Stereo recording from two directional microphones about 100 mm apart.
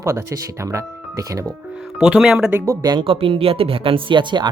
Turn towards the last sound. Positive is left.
turn(degrees=-50)  # may be behind; listen again after turning